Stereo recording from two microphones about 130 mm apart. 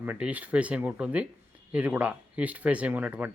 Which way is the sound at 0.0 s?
10° right (ahead or behind).